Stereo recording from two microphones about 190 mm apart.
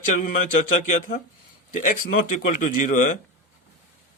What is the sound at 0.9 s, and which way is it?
Speech, 40° left (ahead or behind).